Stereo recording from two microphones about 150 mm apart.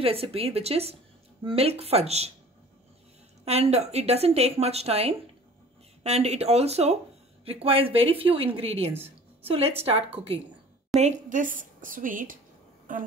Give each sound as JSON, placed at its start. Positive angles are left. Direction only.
{"t": 0.0, "sound": "a woman's voice", "side_deg": -40}
{"t": 3.4, "sound": "a woman's voice", "side_deg": -45}
{"t": 11.0, "sound": "a woman's voice", "side_deg": -55}